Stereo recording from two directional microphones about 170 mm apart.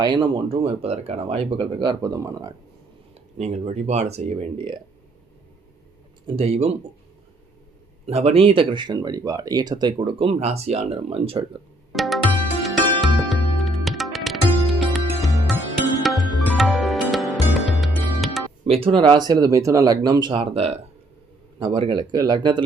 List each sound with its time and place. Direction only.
0.0 s speech: 30° right (ahead or behind)
3.3 s speech: 40° right (ahead or behind)
6.2 s speech: 35° right (ahead or behind)
8.0 s speech: 35° right (ahead or behind)
11.9 s music: centre (ahead or behind)
18.6 s speech: 35° right (ahead or behind)
21.6 s speech: 25° right (ahead or behind)